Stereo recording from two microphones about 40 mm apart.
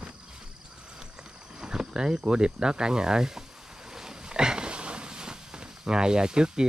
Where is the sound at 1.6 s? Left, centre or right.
Centre.